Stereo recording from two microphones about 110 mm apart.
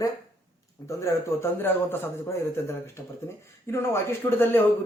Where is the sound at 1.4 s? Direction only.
20° left (ahead or behind).